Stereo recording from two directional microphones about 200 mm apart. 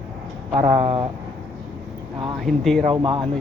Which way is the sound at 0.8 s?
25° right (ahead or behind).